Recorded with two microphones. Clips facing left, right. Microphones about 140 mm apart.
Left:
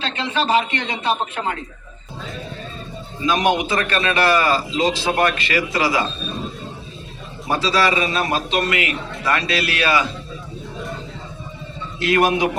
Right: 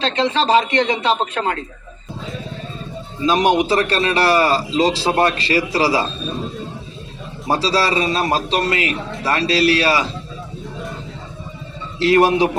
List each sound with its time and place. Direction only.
0.2 s a man's voice: 35° right (ahead or behind)
1.0 s speech: 70° right (ahead or behind)
3.2 s a man's voice: 30° right (ahead or behind)
7.4 s a man's voice: 35° right (ahead or behind)
11.9 s a man's voice: 30° right (ahead or behind)